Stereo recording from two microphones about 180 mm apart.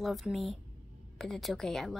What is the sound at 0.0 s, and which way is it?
Speech, centre (ahead or behind).